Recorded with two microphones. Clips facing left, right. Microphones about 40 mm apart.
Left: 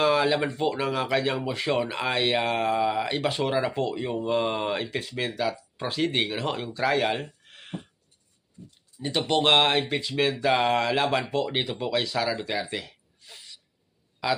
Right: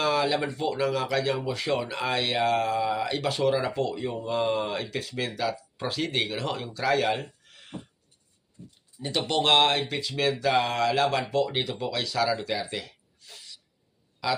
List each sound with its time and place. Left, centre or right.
0.0 s speech: centre
7.2 s a sound: left
9.0 s a man's voice: centre